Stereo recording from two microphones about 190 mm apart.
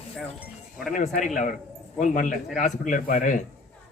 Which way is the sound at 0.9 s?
40° left (ahead or behind).